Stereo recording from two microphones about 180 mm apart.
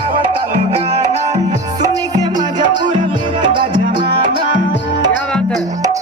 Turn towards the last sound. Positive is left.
turn(degrees=-20)  # may be behind; listen again after turning